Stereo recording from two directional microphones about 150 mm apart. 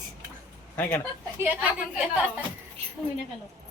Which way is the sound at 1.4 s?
10° right (ahead or behind).